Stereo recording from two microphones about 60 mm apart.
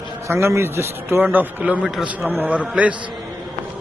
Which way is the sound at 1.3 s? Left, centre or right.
Right.